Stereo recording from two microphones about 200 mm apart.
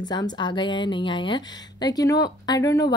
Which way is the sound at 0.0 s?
20° left (ahead or behind).